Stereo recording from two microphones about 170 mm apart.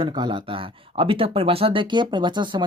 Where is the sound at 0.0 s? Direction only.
25° right (ahead or behind).